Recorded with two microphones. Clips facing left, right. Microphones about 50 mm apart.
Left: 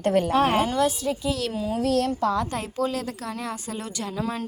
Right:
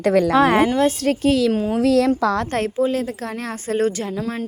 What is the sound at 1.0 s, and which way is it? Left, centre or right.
Speech, right.